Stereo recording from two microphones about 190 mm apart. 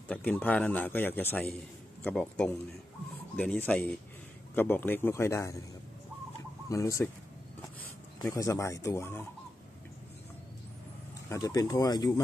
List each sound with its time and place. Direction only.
0.1 s a man's voice: 5° left (ahead or behind)
6.7 s a man's voice: 15° left (ahead or behind)
8.2 s a man's voice: 15° left (ahead or behind)
11.2 s speech: 20° left (ahead or behind)